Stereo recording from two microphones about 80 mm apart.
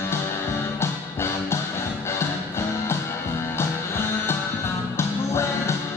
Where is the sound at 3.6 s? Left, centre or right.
Left.